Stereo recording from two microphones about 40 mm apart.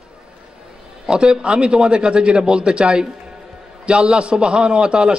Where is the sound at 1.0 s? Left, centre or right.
Right.